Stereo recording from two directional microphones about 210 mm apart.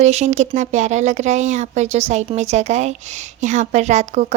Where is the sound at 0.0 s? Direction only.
30° right (ahead or behind).